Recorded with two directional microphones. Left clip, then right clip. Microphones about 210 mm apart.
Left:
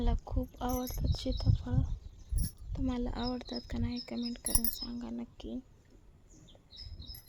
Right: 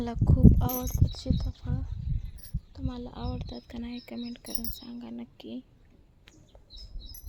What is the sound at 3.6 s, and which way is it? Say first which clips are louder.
Speech: even; centre (ahead or behind).